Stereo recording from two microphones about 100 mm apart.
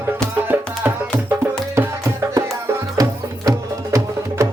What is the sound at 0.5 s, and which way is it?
Music, 15° right (ahead or behind).